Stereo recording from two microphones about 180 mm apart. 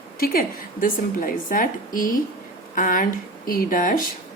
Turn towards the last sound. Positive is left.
turn(degrees=50)  # may be behind; listen again after turning